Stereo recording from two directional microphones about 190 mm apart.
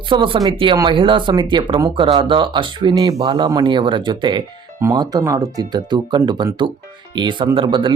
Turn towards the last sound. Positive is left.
turn(degrees=-25)  # may be behind; listen again after turning